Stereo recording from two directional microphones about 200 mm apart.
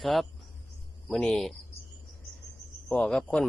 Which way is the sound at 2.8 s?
5° left (ahead or behind).